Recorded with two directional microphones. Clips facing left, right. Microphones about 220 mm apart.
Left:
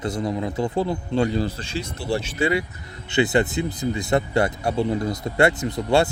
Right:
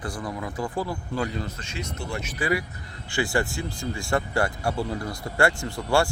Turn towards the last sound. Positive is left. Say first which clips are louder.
# left 4 dB
turn(degrees=20)  # may be behind; listen again after turning